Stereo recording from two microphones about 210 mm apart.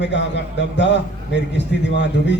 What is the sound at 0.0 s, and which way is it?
A man's voice, 55° left (ahead or behind).